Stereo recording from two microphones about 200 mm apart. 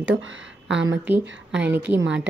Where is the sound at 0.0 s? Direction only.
75° right (ahead or behind).